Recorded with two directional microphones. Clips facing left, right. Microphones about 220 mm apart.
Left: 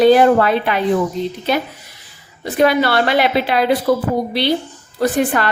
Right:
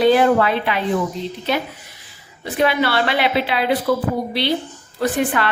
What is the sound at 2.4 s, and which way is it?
A woman's voice, 40° left (ahead or behind).